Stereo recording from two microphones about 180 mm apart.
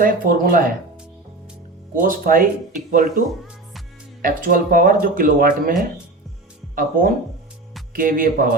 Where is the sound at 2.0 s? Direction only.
50° right (ahead or behind).